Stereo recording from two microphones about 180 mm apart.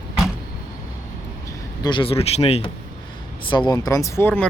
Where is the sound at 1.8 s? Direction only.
25° left (ahead or behind); by 4.5 s 10° left (ahead or behind).